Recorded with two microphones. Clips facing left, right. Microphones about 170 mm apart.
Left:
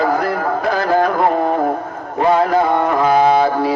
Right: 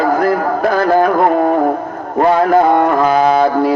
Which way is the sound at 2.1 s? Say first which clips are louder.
Right 3 dB; 55° right (ahead or behind).